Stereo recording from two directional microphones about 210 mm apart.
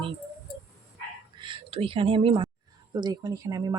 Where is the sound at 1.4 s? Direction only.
25° right (ahead or behind).